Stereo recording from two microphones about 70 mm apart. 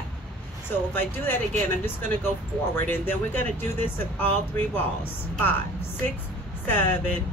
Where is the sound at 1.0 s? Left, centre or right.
Left.